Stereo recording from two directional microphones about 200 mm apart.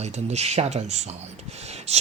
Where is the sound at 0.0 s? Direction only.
35° right (ahead or behind).